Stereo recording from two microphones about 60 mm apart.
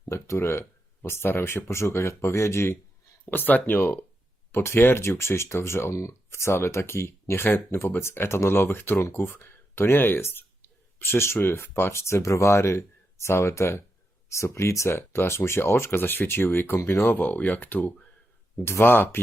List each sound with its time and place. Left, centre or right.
0.1 s speech: left
3.2 s speech: left
7.4 s speech: left
14.9 s speech: left
18.6 s speech: left